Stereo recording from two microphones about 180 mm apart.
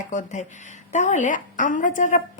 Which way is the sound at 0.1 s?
45° left (ahead or behind).